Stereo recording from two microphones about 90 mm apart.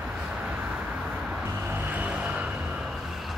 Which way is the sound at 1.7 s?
20° right (ahead or behind).